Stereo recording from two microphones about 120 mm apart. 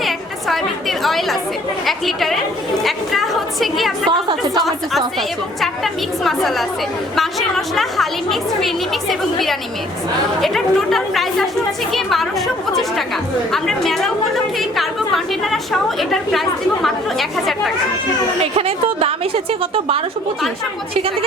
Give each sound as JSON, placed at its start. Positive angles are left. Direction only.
{"t": 0.0, "sound": "chatter", "side_deg": 0}
{"t": 1.9, "sound": "a woman's voice", "side_deg": 0}
{"t": 2.8, "sound": "a sound", "side_deg": 0}
{"t": 5.5, "sound": "a woman's voice", "side_deg": 0}
{"t": 13.5, "sound": "a woman's voice", "side_deg": 0}
{"t": 18.5, "sound": "a woman's voice", "side_deg": -55}